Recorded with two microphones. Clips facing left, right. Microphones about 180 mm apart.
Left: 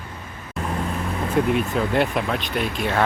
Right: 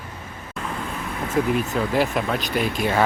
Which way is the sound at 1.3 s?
Centre (ahead or behind).